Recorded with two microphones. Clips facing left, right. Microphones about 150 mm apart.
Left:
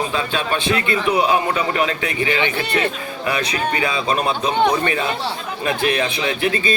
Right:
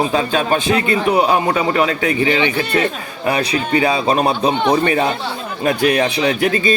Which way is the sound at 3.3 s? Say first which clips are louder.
Right 5 dB; 35° right (ahead or behind).